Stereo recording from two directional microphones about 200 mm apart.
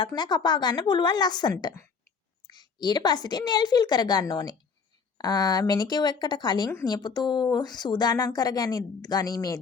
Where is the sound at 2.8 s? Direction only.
20° left (ahead or behind).